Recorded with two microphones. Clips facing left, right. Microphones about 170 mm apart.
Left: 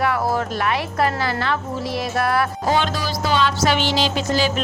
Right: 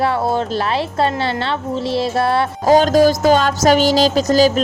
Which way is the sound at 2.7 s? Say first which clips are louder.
Right 15 dB; 40° right (ahead or behind).